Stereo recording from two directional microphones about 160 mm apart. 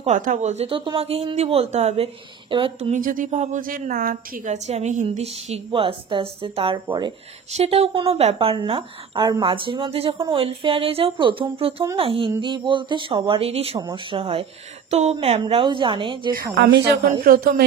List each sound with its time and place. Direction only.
0.0 s speech: 50° right (ahead or behind)
2.5 s speech: 30° right (ahead or behind)
2.9 s speech: 60° right (ahead or behind); by 16.3 s 30° right (ahead or behind)
16.3 s a woman's voice: 80° right